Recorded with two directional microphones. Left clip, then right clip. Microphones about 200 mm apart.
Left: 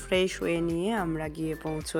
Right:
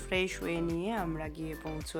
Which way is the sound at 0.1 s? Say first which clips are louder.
Left 6 dB; 20° left (ahead or behind).